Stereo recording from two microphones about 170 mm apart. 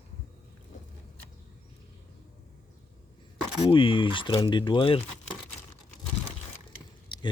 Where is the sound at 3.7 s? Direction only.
30° left (ahead or behind).